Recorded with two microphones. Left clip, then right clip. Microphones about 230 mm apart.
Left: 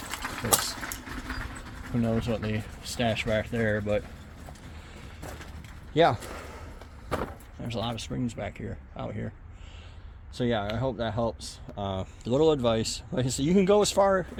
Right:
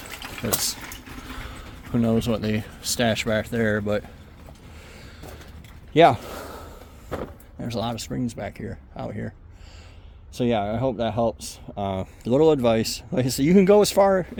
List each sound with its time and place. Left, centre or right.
2.0 s speech: right
5.9 s a sound: right
7.6 s speech: right
10.3 s speech: right